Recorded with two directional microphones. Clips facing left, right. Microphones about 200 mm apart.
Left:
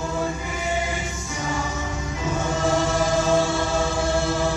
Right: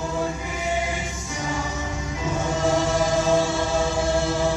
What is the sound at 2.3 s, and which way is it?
Choir, 15° right (ahead or behind).